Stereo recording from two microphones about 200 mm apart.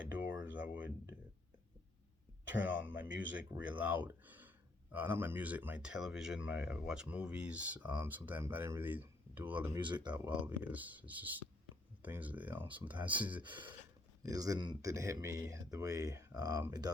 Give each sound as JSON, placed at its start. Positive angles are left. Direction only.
{"t": 0.4, "sound": "speech", "side_deg": -5}
{"t": 2.5, "sound": "speech", "side_deg": -10}
{"t": 10.2, "sound": "speech", "side_deg": -10}